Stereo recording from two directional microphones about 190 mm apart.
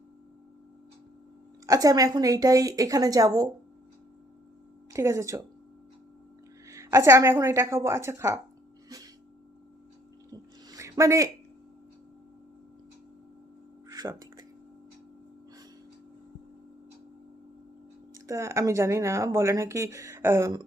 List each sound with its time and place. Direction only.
1.6 s a woman's voice: 20° right (ahead or behind)
4.9 s speech: 15° right (ahead or behind)
6.7 s speech: 15° right (ahead or behind)
10.3 s a sound: 20° right (ahead or behind)
13.9 s a sound: 20° right (ahead or behind)
18.1 s speech: 15° right (ahead or behind)